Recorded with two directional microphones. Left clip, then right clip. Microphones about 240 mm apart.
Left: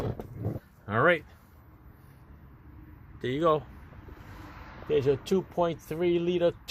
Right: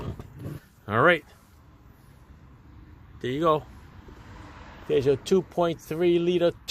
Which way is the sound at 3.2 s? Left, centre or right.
Centre.